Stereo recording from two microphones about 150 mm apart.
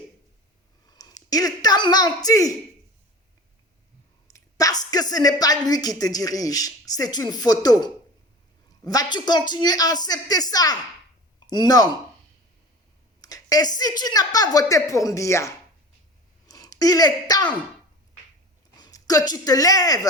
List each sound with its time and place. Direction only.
0.9 s speech: 25° left (ahead or behind)
4.3 s a woman's voice: 20° left (ahead or behind)
13.2 s a sound: 25° left (ahead or behind)
13.7 s a woman's voice: 25° left (ahead or behind)
18.8 s a woman's voice: 25° left (ahead or behind)